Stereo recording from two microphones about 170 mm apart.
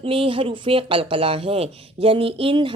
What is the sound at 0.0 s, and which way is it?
Speech, 30° right (ahead or behind).